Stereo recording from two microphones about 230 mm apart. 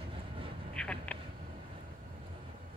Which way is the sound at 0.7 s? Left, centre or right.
Centre.